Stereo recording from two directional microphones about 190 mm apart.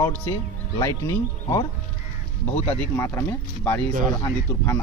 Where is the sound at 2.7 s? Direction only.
10° left (ahead or behind).